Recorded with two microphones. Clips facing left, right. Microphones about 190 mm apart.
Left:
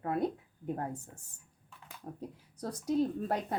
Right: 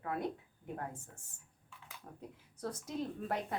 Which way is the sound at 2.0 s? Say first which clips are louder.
Left 8 dB; 35° left (ahead or behind).